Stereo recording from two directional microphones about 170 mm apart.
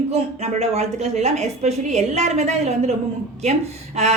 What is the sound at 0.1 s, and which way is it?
Speech, 40° right (ahead or behind).